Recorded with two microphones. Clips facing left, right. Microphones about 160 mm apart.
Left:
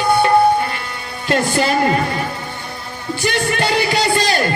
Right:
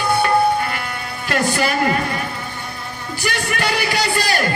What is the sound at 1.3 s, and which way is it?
Speech, 25° left (ahead or behind).